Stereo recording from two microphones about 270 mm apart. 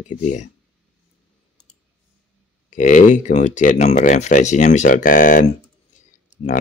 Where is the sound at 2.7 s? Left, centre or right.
Left.